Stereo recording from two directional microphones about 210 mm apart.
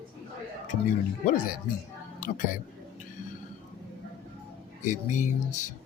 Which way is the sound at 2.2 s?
40° left (ahead or behind).